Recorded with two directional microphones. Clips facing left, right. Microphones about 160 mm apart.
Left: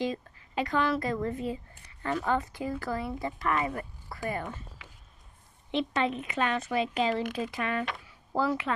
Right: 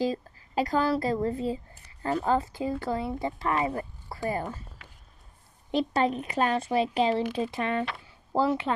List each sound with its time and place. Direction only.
0.0 s a woman's voice: 35° right (ahead or behind)
5.7 s a woman's voice: 40° right (ahead or behind)
8.0 s a sound: 30° right (ahead or behind)